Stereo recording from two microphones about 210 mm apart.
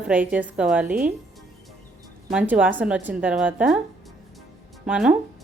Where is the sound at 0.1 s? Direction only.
5° right (ahead or behind).